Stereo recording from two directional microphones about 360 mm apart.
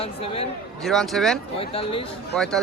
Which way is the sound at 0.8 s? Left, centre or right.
Centre.